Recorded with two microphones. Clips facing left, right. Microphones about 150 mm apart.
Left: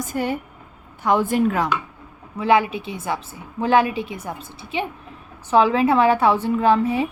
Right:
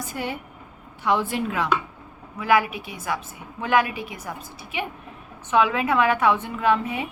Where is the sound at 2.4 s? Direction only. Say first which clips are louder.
Left 3 dB; 25° left (ahead or behind).